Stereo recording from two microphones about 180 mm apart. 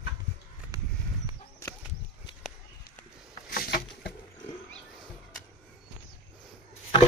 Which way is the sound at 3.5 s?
60° left (ahead or behind).